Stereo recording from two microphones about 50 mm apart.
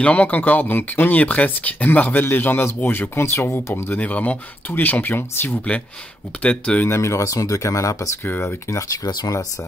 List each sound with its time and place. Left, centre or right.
0.0 s speech: left
3.2 s speech: left
4.0 s speech: left
6.4 s speech: left
6.9 s speech: left
8.3 s speech: left
8.6 s speech: left